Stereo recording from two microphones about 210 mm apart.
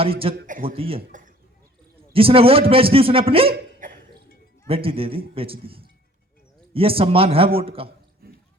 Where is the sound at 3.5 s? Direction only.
40° right (ahead or behind).